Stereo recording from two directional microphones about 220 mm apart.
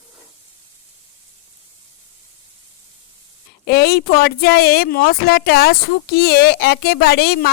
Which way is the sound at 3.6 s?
45° left (ahead or behind).